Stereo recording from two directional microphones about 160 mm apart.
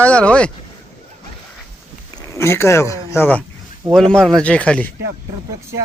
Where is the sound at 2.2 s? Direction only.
20° left (ahead or behind).